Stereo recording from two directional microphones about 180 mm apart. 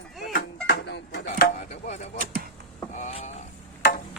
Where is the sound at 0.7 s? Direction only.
70° left (ahead or behind).